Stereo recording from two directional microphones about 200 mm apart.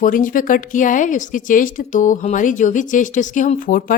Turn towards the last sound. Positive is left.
turn(degrees=45)  # may be behind; listen again after turning